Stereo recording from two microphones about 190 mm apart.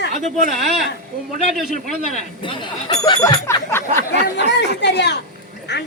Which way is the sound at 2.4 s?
25° left (ahead or behind).